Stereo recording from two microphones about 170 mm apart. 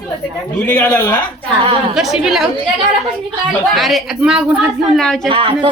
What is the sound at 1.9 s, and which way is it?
Speech, centre (ahead or behind).